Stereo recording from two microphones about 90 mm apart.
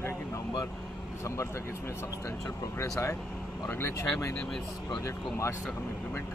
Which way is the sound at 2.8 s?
35° left (ahead or behind).